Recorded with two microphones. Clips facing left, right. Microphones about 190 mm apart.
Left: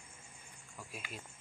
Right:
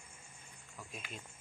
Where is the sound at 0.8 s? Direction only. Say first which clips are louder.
Left 1 dB; 5° left (ahead or behind).